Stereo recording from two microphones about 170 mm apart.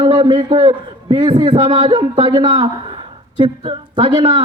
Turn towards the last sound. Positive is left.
turn(degrees=-30)  # may be behind; listen again after turning